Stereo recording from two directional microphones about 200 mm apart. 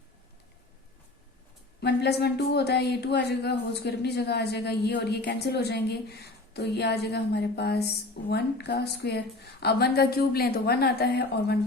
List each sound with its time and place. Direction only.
1.8 s a woman's voice: 55° left (ahead or behind)